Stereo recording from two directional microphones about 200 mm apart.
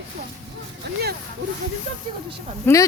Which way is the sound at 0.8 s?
55° right (ahead or behind).